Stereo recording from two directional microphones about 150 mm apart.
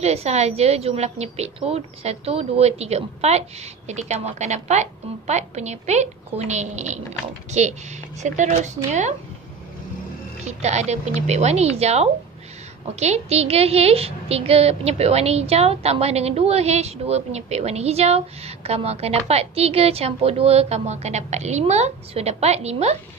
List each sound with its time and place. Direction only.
0.0 s a woman's voice: 45° right (ahead or behind)
10.4 s a woman's voice: 50° right (ahead or behind)